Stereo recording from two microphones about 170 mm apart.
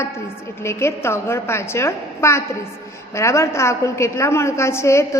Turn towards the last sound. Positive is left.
turn(degrees=15)  # may be behind; listen again after turning